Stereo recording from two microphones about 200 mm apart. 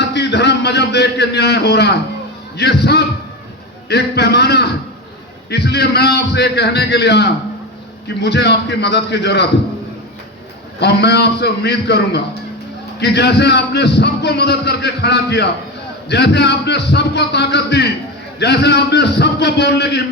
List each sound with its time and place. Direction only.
0.1 s a man's voice: 60° left (ahead or behind)
10.8 s a man's voice: 55° left (ahead or behind)